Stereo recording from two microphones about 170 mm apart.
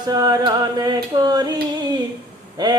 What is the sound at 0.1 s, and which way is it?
Music, 20° right (ahead or behind).